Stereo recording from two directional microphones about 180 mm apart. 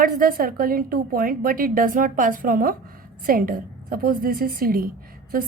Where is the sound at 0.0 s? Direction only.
50° right (ahead or behind).